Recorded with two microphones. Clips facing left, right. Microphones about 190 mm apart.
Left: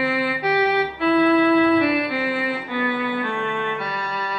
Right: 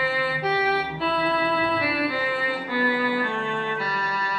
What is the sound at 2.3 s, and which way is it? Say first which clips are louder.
Music: left 2 dB; centre (ahead or behind).